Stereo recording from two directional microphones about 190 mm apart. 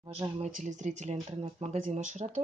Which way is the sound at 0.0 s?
25° right (ahead or behind).